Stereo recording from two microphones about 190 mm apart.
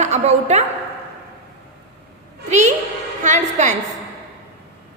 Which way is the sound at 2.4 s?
40° right (ahead or behind).